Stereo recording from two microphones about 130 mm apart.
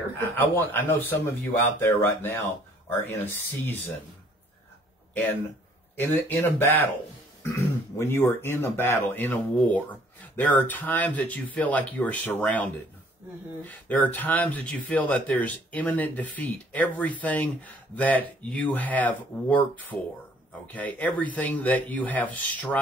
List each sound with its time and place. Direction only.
0.4 s speech: 15° left (ahead or behind)
5.9 s speech: 15° left (ahead or behind)